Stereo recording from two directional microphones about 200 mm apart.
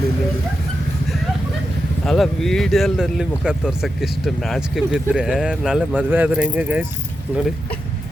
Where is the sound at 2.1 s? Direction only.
Centre (ahead or behind).